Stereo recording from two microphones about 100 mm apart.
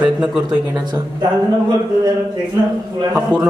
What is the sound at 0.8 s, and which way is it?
Speech, 45° right (ahead or behind).